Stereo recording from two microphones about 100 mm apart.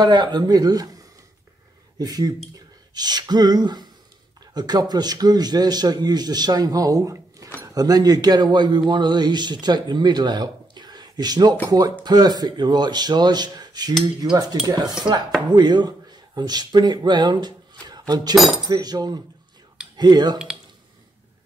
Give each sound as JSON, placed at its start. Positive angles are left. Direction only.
{"t": 0.0, "sound": "speech", "side_deg": -45}
{"t": 18.3, "sound": "speech", "side_deg": 0}
{"t": 18.7, "sound": "cutlery", "side_deg": -40}
{"t": 20.0, "sound": "speech", "side_deg": -45}